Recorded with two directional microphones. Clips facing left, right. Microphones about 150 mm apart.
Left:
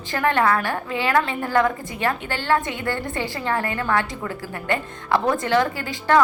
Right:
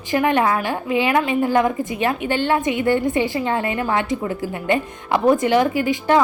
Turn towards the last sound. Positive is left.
turn(degrees=-15)  # may be behind; listen again after turning